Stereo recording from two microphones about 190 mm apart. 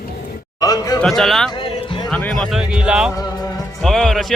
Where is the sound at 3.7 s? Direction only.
Centre (ahead or behind).